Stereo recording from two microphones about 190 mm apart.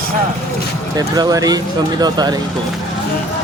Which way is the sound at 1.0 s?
20° right (ahead or behind).